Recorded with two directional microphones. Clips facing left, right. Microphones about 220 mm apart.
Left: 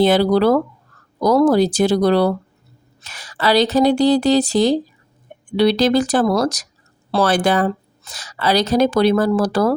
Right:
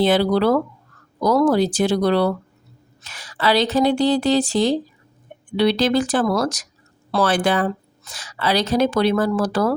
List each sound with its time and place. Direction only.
0.0 s speech: 40° left (ahead or behind)